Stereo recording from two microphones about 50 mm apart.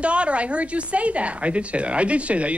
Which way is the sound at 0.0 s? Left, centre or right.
Right.